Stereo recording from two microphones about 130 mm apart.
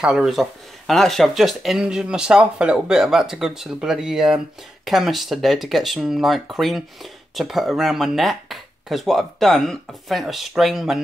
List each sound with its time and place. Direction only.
0.0 s speech: 5° right (ahead or behind)